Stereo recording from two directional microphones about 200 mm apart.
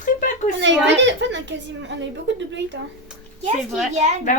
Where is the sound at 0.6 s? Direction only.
65° right (ahead or behind).